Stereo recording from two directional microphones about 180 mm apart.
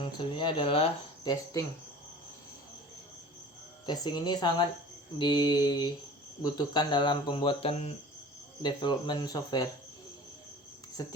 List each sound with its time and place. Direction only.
0.0 s speech: 25° left (ahead or behind)
3.8 s speech: 25° left (ahead or behind)
11.0 s speech: 20° left (ahead or behind)